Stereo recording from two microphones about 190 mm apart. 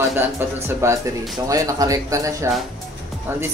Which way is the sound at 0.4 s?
15° right (ahead or behind).